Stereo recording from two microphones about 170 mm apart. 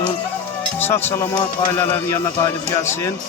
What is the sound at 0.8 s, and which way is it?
Speech, 10° left (ahead or behind).